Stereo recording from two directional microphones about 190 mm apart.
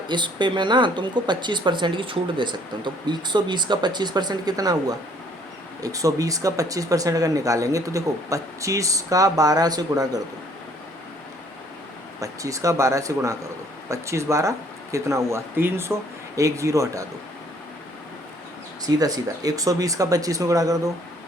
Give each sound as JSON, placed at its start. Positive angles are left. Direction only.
{"t": 0.1, "sound": "speech", "side_deg": -25}
{"t": 12.2, "sound": "speech", "side_deg": -15}
{"t": 18.9, "sound": "speech", "side_deg": -20}